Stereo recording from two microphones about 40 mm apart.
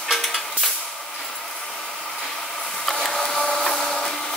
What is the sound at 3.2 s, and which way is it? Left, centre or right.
Printer, centre.